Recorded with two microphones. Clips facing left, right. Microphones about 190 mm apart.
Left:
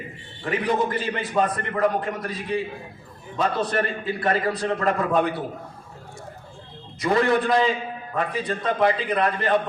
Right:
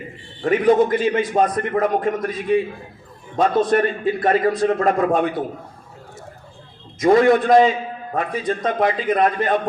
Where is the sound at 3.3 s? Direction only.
45° right (ahead or behind).